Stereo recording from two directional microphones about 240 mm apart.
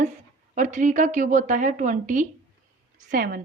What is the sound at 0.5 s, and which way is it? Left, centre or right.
A woman's voice, right.